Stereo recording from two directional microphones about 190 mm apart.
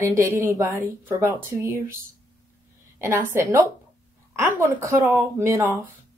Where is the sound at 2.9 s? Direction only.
15° right (ahead or behind).